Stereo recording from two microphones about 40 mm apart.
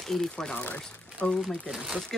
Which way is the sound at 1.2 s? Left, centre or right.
Left.